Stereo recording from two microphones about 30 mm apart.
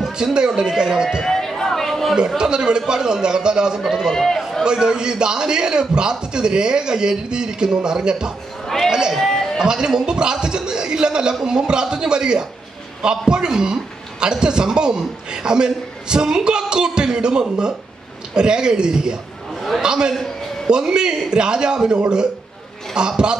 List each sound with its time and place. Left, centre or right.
0.1 s a man's voice: right
1.2 s chatter: centre
1.6 s a sound: centre
2.1 s a man's voice: right
4.1 s a man's voice: centre
4.4 s a sound: centre
4.6 s a man's voice: right
9.3 s a sound: centre
9.6 s a man's voice: right